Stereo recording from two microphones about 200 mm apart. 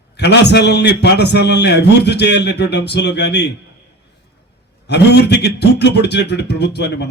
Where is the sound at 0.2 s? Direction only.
55° left (ahead or behind).